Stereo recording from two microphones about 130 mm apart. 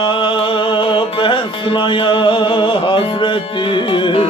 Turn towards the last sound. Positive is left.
turn(degrees=40)  # may be behind; listen again after turning